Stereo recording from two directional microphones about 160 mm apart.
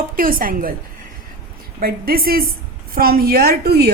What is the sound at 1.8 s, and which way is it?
A woman's voice, 65° right (ahead or behind).